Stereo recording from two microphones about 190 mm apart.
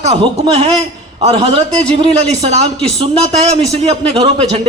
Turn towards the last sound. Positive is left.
turn(degrees=-30)  # may be behind; listen again after turning